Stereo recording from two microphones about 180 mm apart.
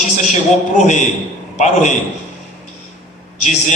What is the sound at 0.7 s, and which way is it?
Speech, 40° left (ahead or behind).